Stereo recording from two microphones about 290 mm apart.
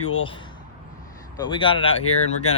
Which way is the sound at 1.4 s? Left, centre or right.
Centre.